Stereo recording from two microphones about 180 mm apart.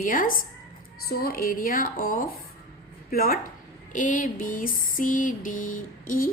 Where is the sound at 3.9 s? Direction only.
45° left (ahead or behind).